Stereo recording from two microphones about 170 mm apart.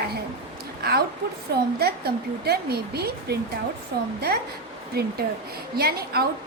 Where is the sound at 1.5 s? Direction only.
65° right (ahead or behind).